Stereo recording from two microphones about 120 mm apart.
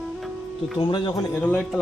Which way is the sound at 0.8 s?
40° left (ahead or behind).